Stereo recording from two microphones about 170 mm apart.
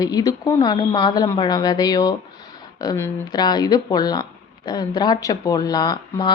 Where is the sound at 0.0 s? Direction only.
20° left (ahead or behind).